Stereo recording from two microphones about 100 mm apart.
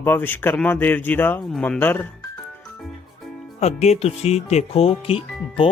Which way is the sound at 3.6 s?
90° left.